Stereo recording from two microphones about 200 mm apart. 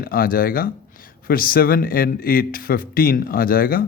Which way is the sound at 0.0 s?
45° left (ahead or behind).